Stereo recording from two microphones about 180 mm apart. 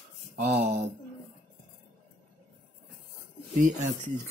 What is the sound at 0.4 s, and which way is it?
Speech, 40° right (ahead or behind).